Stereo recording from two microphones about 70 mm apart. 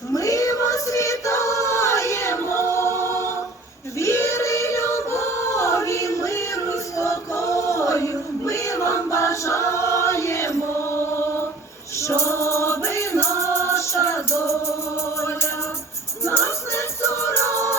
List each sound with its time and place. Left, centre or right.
0.1 s choir: left
11.9 s music: left